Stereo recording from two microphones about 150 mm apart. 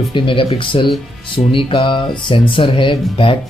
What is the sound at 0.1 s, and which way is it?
Speech, 35° left (ahead or behind).